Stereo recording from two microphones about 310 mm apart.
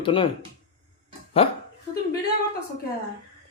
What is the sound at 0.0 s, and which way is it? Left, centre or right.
Speech, centre.